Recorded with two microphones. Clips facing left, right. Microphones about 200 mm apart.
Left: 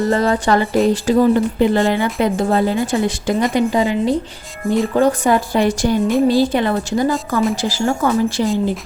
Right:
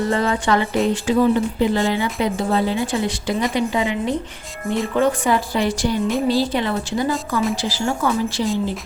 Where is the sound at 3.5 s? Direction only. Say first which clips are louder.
Left 5 dB; 40° left (ahead or behind).